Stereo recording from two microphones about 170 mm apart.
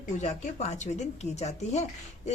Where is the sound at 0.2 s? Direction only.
40° left (ahead or behind).